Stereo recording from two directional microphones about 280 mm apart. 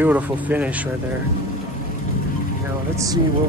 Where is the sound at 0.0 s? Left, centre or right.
Centre.